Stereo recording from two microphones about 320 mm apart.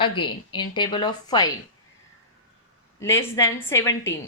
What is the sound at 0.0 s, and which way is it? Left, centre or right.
Speech, centre.